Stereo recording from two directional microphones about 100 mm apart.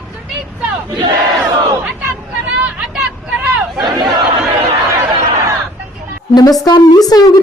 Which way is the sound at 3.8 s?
50° right (ahead or behind).